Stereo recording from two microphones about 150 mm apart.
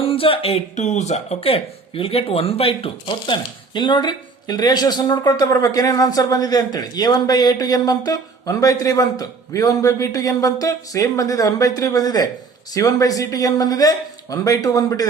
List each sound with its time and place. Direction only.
0.0 s speech: 40° left (ahead or behind)